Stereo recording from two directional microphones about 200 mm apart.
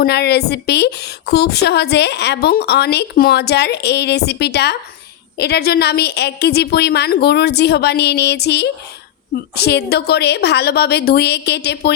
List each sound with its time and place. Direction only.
0.0 s a woman's voice: 55° left (ahead or behind)